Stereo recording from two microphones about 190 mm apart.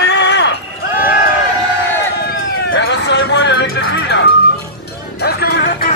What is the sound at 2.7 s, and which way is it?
Music, 60° left (ahead or behind).